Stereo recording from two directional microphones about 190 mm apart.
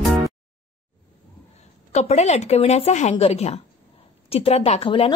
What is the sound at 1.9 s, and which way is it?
A woman's voice, 35° left (ahead or behind).